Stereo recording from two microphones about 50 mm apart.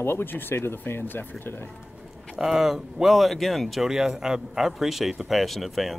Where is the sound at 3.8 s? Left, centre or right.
Centre.